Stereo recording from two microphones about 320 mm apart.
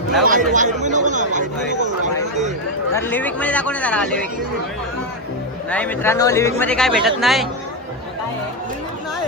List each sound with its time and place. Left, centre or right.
0.3 s speech: right
2.9 s a man's voice: centre
5.7 s a man's voice: centre